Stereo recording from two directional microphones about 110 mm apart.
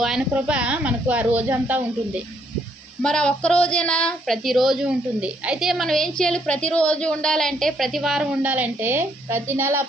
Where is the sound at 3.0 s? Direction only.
10° left (ahead or behind).